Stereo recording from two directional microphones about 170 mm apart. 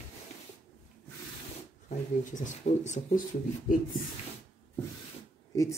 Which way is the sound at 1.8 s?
45° left (ahead or behind).